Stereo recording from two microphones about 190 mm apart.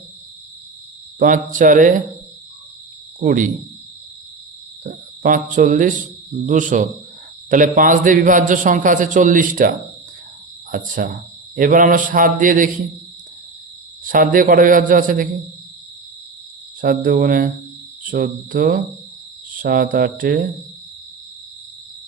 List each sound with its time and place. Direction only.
1.2 s a man's voice: 45° right (ahead or behind)
3.2 s a man's voice: 45° right (ahead or behind)
4.8 s a man's voice: 45° right (ahead or behind)
14.1 s a man's voice: 45° right (ahead or behind)
16.8 s a man's voice: 50° right (ahead or behind)